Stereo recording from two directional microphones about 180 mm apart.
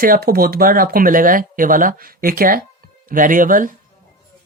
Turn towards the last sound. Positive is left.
turn(degrees=-50)  # may be behind; listen again after turning